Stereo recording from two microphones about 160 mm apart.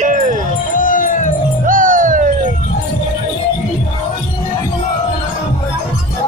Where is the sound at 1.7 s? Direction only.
60° right (ahead or behind).